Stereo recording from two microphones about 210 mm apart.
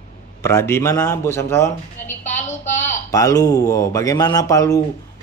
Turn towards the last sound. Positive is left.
turn(degrees=15)  # may be behind; listen again after turning